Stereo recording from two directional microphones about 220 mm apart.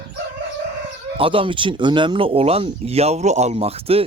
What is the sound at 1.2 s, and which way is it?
Speech, 25° right (ahead or behind).